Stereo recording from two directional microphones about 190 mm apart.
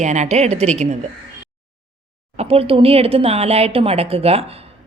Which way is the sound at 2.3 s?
35° right (ahead or behind).